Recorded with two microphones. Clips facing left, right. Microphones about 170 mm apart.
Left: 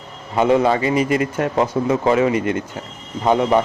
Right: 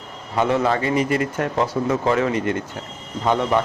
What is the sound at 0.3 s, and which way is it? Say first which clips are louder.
A man's voice: left 4 dB; 15° left (ahead or behind).